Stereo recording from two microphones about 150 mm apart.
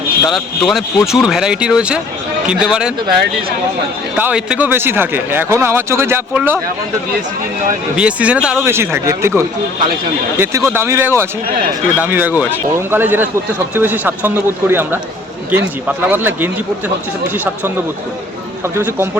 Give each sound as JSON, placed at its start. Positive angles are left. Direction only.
{"t": 0.3, "sound": "speech", "side_deg": 0}
{"t": 4.2, "sound": "speech", "side_deg": -5}
{"t": 7.9, "sound": "speech", "side_deg": -10}
{"t": 8.6, "sound": "speech", "side_deg": -15}